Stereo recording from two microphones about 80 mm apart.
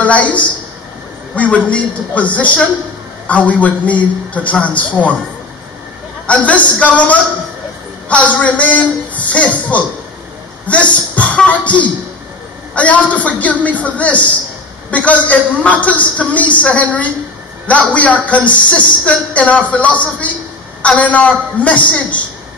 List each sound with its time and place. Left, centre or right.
0.0 s a man's voice: centre
6.2 s a man's voice: centre